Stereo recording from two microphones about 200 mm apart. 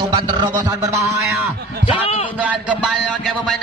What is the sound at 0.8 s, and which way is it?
Speech, 15° right (ahead or behind).